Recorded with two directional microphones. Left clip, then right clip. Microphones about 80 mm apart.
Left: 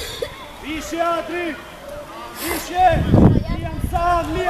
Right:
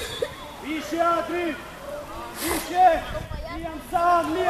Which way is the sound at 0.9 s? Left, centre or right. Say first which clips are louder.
Left 2 dB; left.